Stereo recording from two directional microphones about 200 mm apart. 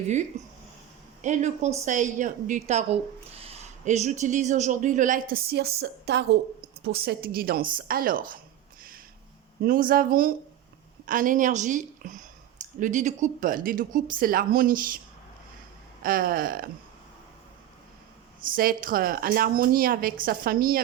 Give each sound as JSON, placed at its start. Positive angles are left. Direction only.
{"t": 0.4, "sound": "a woman's voice", "side_deg": -35}
{"t": 5.3, "sound": "a woman's voice", "side_deg": -50}
{"t": 9.6, "sound": "a woman's voice", "side_deg": -45}
{"t": 16.0, "sound": "a woman's voice", "side_deg": -45}
{"t": 18.4, "sound": "a woman's voice", "side_deg": -45}